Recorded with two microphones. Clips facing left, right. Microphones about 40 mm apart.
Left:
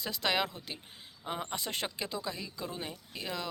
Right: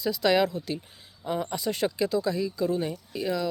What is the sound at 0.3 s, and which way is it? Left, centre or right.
Speech, left.